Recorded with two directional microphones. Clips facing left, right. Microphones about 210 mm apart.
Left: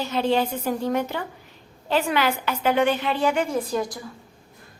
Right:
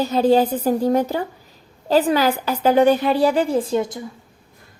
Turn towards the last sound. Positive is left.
turn(degrees=-25)  # may be behind; listen again after turning